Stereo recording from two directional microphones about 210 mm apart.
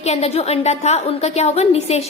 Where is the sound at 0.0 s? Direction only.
30° left (ahead or behind).